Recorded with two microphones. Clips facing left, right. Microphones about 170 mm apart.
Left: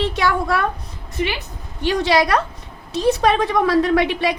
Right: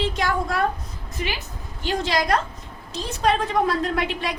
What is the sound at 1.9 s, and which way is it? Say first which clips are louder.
A woman's voice: left 5 dB; 70° left (ahead or behind).